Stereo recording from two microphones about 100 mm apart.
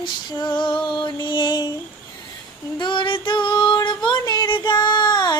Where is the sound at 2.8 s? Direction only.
55° left (ahead or behind).